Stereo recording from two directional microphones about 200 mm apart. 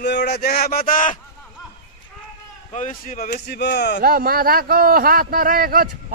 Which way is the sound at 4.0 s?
45° right (ahead or behind).